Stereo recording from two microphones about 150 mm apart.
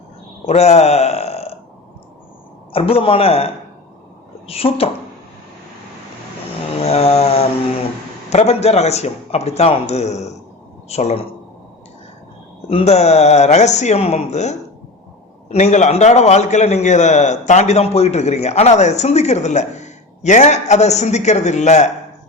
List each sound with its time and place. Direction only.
0.4 s speech: 45° left (ahead or behind)
2.7 s a man's voice: 40° left (ahead or behind)
6.7 s mantra: 45° left (ahead or behind)
8.3 s a man's voice: 45° left (ahead or behind)
12.6 s a man's voice: 40° left (ahead or behind)